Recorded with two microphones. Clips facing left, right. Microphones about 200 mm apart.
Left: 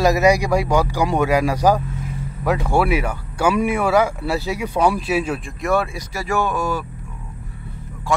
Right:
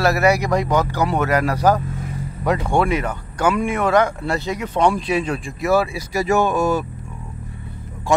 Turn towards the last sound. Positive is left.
turn(degrees=-25)  # may be behind; listen again after turning